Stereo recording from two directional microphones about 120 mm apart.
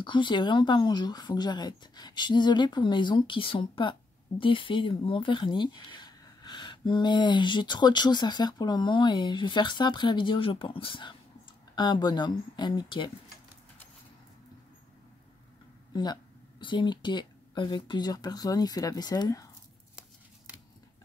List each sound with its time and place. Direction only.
0.0 s speech: 40° left (ahead or behind)
15.9 s speech: 35° left (ahead or behind)